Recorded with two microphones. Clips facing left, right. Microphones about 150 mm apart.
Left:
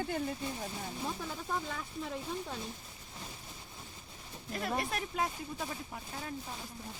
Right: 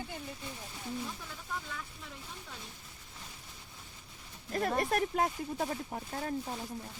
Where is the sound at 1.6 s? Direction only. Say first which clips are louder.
Left 5 dB; 35° left (ahead or behind).